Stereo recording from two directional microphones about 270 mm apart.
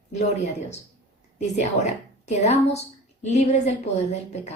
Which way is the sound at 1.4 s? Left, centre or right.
Left.